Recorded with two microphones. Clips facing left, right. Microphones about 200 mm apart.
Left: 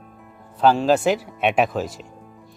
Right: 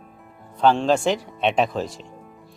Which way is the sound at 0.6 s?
5° left (ahead or behind).